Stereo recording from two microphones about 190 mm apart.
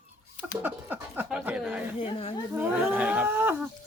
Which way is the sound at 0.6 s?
10° right (ahead or behind).